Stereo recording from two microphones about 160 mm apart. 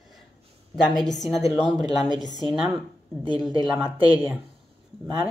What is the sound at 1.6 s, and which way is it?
Speech, 25° right (ahead or behind).